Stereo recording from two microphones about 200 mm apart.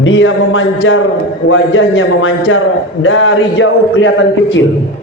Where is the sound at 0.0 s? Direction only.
70° left (ahead or behind).